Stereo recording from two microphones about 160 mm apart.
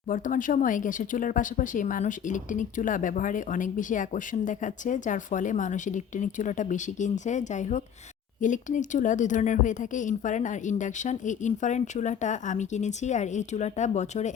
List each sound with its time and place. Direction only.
0.1 s speech: 55° left (ahead or behind)